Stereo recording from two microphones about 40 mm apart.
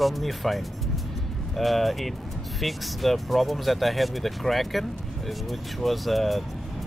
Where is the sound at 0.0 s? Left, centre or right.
Centre.